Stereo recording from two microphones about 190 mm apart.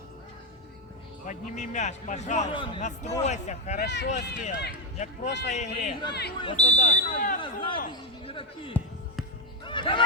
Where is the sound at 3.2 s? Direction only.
35° left (ahead or behind).